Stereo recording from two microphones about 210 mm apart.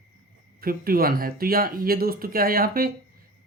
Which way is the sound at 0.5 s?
45° right (ahead or behind).